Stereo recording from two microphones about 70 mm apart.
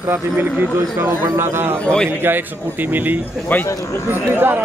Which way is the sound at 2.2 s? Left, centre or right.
Right.